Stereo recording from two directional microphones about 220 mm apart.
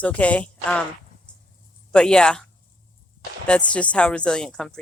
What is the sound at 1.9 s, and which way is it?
Speech, 5° left (ahead or behind).